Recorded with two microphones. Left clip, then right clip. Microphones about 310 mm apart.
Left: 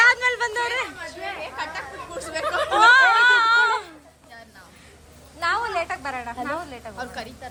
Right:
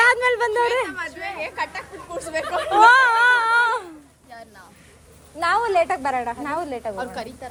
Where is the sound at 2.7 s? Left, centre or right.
Centre.